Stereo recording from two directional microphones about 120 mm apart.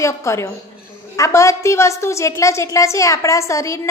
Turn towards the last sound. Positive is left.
turn(degrees=25)  # may be behind; listen again after turning